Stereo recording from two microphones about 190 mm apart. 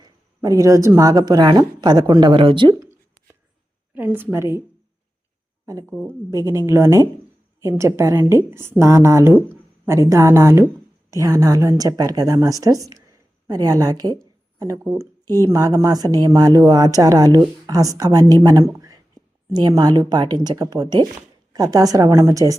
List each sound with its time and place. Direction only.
0.0 s speech: 15° right (ahead or behind)
3.9 s a woman's voice: 10° right (ahead or behind)
5.8 s speech: centre (ahead or behind)
6.1 s a woman's voice: 15° right (ahead or behind)